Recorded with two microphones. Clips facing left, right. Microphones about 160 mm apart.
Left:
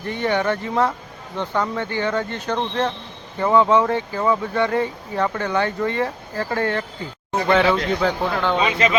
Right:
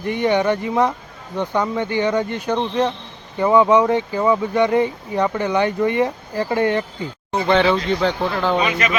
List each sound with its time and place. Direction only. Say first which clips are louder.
0.0 s speech: right 4 dB; 15° right (ahead or behind)
7.4 s speech: right 1 dB; 5° left (ahead or behind)
8.6 s speech: left 1 dB; 25° left (ahead or behind)